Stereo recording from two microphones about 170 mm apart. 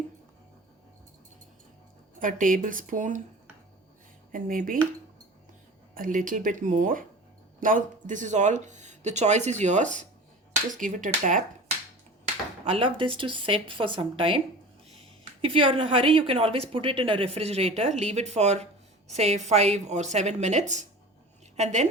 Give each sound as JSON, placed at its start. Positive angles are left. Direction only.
{"t": 2.1, "sound": "speech", "side_deg": -50}
{"t": 4.3, "sound": "speech", "side_deg": -50}
{"t": 5.9, "sound": "speech", "side_deg": -55}
{"t": 12.6, "sound": "a woman's voice", "side_deg": -30}